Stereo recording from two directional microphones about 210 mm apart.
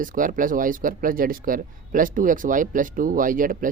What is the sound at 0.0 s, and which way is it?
Speech, 40° right (ahead or behind).